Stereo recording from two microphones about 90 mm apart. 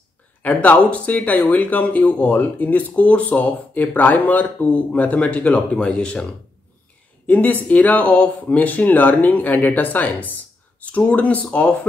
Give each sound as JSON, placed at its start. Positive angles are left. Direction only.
{"t": 0.4, "sound": "speech", "side_deg": 15}
{"t": 7.2, "sound": "speech", "side_deg": 20}